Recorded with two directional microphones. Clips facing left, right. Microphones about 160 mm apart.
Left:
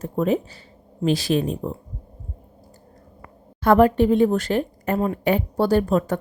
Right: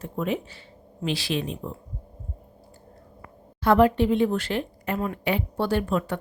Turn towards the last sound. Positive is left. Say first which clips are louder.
# left 6 dB
turn(degrees=40)  # may be behind; listen again after turning